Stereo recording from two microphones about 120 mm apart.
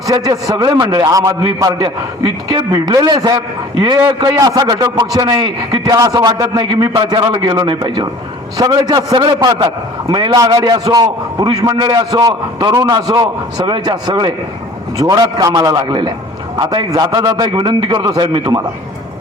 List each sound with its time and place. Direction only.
0.1 s a man's voice: 30° right (ahead or behind)